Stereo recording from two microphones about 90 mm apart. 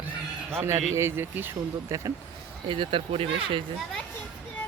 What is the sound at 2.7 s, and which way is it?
Speech, 70° right (ahead or behind).